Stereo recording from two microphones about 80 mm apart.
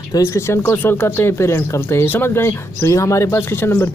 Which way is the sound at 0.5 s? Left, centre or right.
Left.